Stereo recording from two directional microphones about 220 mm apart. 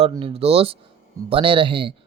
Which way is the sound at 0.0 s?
25° right (ahead or behind).